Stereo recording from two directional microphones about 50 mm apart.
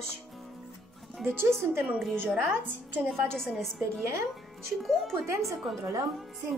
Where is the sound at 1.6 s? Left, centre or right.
Right.